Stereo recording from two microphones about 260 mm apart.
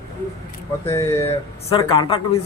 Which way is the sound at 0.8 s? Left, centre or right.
Centre.